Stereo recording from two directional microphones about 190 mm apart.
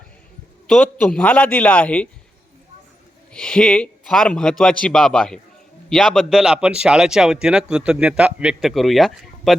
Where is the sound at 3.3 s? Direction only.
5° left (ahead or behind).